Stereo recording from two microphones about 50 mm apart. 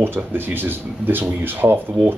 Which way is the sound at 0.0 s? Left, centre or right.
Right.